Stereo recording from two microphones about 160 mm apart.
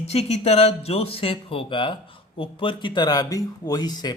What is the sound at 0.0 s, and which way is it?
Speech, 40° left (ahead or behind).